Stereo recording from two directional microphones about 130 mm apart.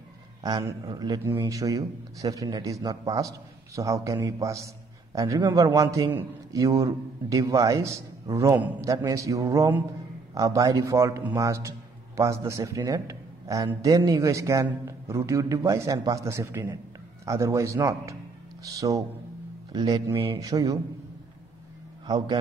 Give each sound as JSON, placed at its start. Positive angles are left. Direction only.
{"t": 0.4, "sound": "a man's voice", "side_deg": -30}
{"t": 22.0, "sound": "a man's voice", "side_deg": -35}